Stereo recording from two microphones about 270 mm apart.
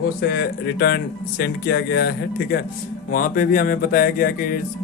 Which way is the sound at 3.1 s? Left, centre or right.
Left.